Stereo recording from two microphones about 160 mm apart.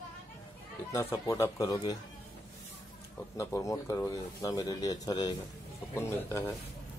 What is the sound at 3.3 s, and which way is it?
Speech, 20° left (ahead or behind).